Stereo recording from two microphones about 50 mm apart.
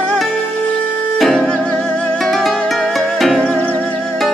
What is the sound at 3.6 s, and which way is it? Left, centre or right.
Music, left.